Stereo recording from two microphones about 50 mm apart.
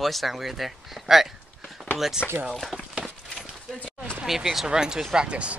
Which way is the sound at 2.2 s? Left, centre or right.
Right.